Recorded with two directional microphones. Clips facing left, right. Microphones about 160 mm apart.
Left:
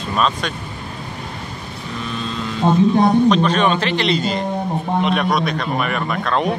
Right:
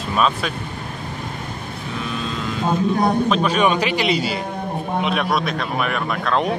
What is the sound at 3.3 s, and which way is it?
Speech, 10° right (ahead or behind).